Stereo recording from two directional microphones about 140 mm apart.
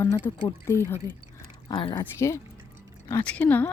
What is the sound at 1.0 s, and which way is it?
Speech, 25° right (ahead or behind).